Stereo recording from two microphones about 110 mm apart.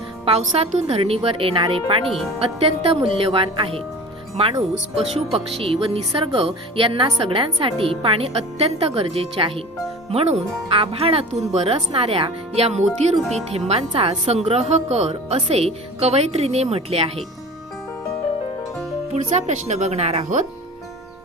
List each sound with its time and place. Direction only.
0.3 s speech: 70° right (ahead or behind)
13.9 s a woman's voice: 50° right (ahead or behind)
14.3 s speech: 75° right (ahead or behind)
15.4 s speech: 70° right (ahead or behind)
19.1 s speech: 90° right